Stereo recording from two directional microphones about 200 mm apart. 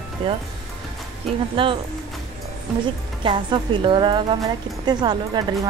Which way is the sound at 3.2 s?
25° right (ahead or behind).